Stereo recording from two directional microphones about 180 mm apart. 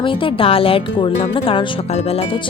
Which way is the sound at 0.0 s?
30° left (ahead or behind).